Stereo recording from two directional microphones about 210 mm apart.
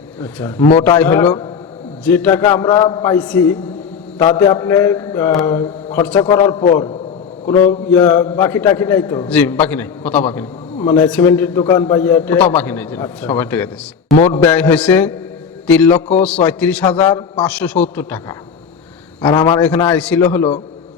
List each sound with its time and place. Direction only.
0.2 s a man's voice: 10° left (ahead or behind)
0.6 s a man's voice: 20° left (ahead or behind)
0.9 s a man's voice: 10° left (ahead or behind); by 6.9 s 25° left (ahead or behind)
7.7 s a man's voice: 15° left (ahead or behind)
19.3 s a man's voice: 20° left (ahead or behind)
19.9 s a man's voice: 5° left (ahead or behind)